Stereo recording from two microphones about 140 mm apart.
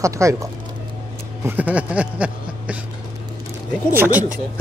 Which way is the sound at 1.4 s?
10° right (ahead or behind).